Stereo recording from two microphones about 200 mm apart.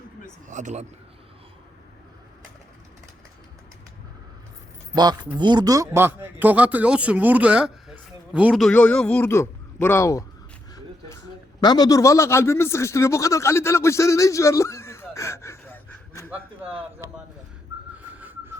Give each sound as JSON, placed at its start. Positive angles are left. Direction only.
{"t": 0.4, "sound": "a man's voice", "side_deg": -40}
{"t": 4.9, "sound": "speech", "side_deg": -20}
{"t": 11.6, "sound": "a man's voice", "side_deg": 20}
{"t": 16.3, "sound": "speech", "side_deg": -5}
{"t": 18.2, "sound": "whistling", "side_deg": -10}